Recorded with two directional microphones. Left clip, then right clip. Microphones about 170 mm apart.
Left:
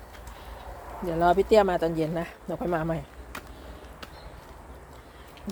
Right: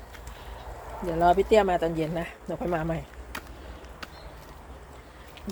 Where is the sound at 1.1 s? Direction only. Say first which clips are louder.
Even; 10° left (ahead or behind).